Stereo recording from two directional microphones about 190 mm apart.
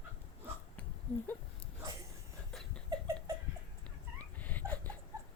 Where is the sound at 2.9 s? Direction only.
15° right (ahead or behind).